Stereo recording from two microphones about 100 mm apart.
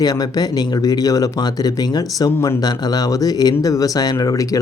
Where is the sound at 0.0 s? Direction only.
40° left (ahead or behind).